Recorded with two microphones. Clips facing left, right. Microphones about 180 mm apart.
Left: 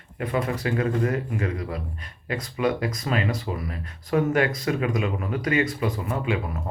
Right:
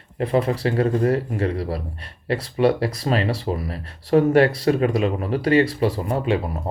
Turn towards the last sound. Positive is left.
turn(degrees=-30)  # may be behind; listen again after turning